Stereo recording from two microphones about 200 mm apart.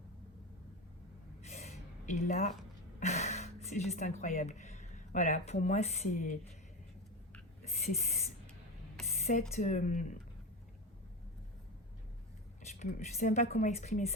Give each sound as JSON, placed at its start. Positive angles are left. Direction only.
{"t": 1.4, "sound": "a sound", "side_deg": 35}
{"t": 3.0, "sound": "speech", "side_deg": 35}
{"t": 7.6, "sound": "speech", "side_deg": 35}
{"t": 9.1, "sound": "a sound", "side_deg": 35}
{"t": 9.6, "sound": "a woman's voice", "side_deg": 40}
{"t": 13.1, "sound": "a woman's voice", "side_deg": 40}